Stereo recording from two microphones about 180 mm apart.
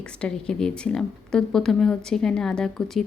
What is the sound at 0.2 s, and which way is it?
A woman's voice, 5° left (ahead or behind).